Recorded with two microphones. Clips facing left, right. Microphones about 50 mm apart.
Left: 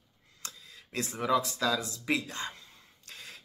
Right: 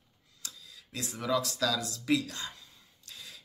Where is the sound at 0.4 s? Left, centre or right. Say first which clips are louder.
Left 2 dB; left.